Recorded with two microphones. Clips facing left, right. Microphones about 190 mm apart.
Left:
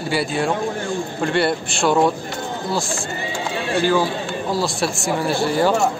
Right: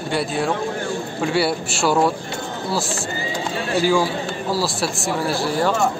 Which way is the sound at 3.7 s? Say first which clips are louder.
Even; 10° right (ahead or behind).